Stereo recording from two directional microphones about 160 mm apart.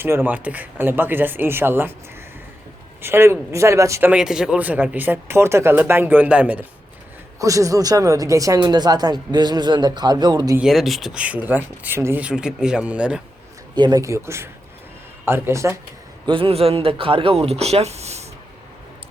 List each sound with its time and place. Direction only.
0.0 s speech: 15° right (ahead or behind)
3.0 s speech: 15° right (ahead or behind)
4.1 s speech: 5° right (ahead or behind)
7.3 s speech: 20° right (ahead or behind)
10.6 s speech: centre (ahead or behind)
13.7 s speech: 25° right (ahead or behind)
16.2 s speech: 35° right (ahead or behind)